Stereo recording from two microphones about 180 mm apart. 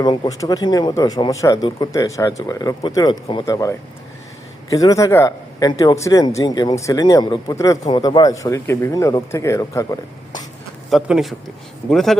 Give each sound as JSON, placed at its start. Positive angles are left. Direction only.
{"t": 0.0, "sound": "speech", "side_deg": 20}
{"t": 10.8, "sound": "speech", "side_deg": 0}